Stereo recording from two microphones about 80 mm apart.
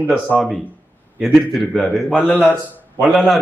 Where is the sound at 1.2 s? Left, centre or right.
Centre.